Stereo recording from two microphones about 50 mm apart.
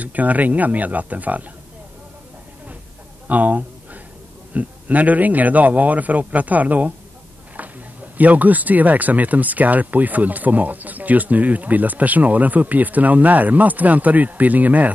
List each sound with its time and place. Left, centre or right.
0.0 s speech: right
3.3 s a sound: right
4.6 s speech: right
8.2 s speech: right